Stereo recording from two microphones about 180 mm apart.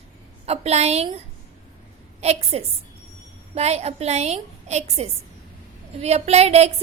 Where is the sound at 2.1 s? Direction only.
35° right (ahead or behind).